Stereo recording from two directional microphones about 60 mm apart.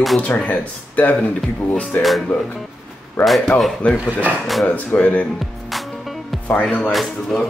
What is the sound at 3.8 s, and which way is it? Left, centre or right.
Speech, left.